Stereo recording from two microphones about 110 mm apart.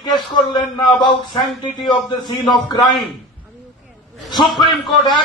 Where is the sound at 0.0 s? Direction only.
45° left (ahead or behind).